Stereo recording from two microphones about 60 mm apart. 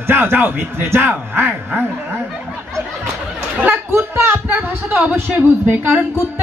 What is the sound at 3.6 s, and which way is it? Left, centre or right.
Chatter, right.